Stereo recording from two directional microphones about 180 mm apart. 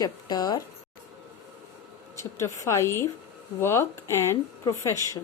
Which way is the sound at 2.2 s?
15° left (ahead or behind).